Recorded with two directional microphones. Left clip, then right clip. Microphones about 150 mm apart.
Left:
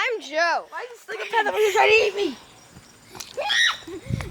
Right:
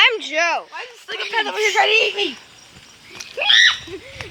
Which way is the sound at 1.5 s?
35° left (ahead or behind).